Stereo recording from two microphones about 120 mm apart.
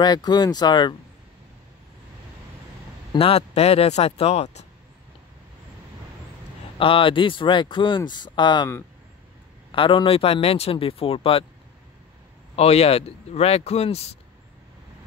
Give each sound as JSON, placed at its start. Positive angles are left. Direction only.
{"t": 0.0, "sound": "speech", "side_deg": 35}
{"t": 3.2, "sound": "speech", "side_deg": 55}
{"t": 6.8, "sound": "speech", "side_deg": 45}
{"t": 9.7, "sound": "speech", "side_deg": 45}
{"t": 12.5, "sound": "speech", "side_deg": 55}